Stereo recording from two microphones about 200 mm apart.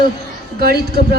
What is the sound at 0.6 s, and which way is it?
Speech, 50° right (ahead or behind).